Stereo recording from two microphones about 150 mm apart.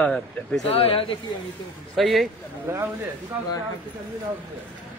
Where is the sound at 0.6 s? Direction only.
40° left (ahead or behind).